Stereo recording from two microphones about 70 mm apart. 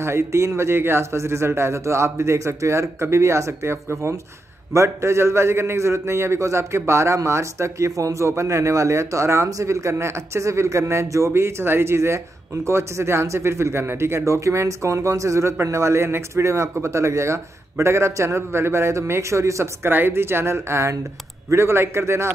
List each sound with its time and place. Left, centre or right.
0.0 s a man's voice: right
19.9 s speech: right